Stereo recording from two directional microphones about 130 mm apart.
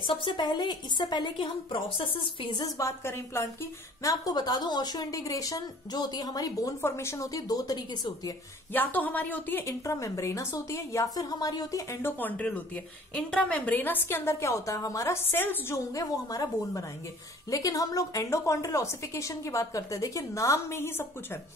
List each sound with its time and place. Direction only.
0.0 s a woman's voice: 40° left (ahead or behind)
8.7 s a woman's voice: 15° left (ahead or behind)